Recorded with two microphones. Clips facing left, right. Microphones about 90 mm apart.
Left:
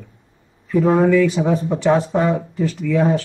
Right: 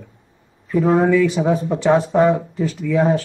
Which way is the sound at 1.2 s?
15° right (ahead or behind).